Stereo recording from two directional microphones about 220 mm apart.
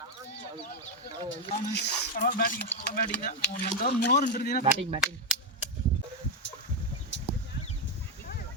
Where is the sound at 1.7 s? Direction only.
40° left (ahead or behind).